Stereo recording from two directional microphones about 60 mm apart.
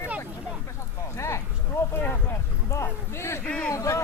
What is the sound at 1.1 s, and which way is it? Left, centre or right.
Speech, left.